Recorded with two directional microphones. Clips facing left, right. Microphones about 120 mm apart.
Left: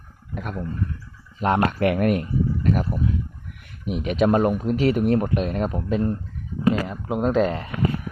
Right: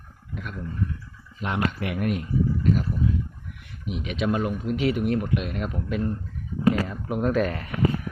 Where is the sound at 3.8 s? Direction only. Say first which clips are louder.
Left 6 dB; 45° left (ahead or behind).